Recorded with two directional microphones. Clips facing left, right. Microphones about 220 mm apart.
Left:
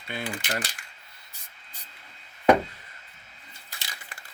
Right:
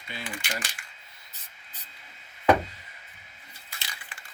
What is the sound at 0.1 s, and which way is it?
Speech, 55° left (ahead or behind).